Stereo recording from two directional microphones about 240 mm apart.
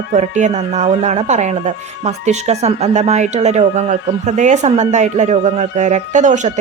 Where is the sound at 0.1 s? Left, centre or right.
Right.